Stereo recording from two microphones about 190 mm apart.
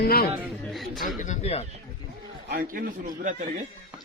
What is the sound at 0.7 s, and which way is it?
Speech, centre (ahead or behind).